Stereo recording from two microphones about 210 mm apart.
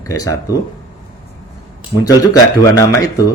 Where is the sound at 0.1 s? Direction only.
15° left (ahead or behind).